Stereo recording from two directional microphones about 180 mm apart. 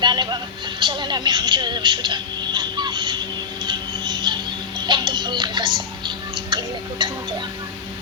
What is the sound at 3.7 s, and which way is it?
Music, 25° right (ahead or behind).